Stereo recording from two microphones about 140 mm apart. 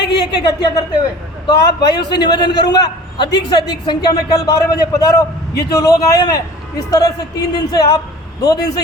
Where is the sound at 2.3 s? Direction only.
30° left (ahead or behind).